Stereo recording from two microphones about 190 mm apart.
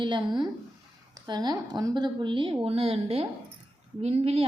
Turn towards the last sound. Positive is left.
turn(degrees=-30)  # may be behind; listen again after turning